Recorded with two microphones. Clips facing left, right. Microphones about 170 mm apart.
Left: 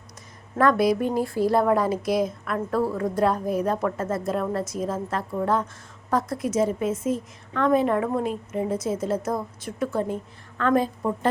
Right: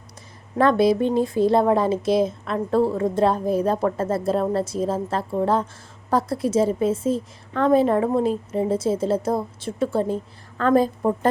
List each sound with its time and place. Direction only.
0.6 s a woman's voice: 25° right (ahead or behind)